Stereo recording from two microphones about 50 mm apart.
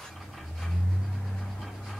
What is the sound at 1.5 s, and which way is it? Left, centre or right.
Vehicle, centre.